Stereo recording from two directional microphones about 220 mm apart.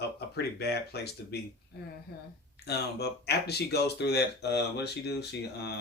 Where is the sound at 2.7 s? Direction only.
50° left (ahead or behind).